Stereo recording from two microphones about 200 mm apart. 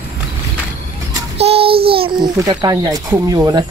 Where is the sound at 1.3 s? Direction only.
30° right (ahead or behind).